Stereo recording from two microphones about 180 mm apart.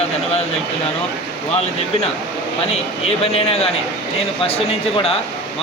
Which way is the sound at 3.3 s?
35° left (ahead or behind).